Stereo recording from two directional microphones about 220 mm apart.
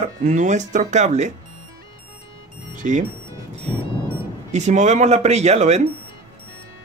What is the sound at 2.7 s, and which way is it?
Speech, 35° right (ahead or behind).